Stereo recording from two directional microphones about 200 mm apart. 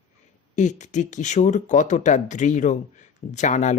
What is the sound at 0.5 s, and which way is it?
Speech, 35° left (ahead or behind).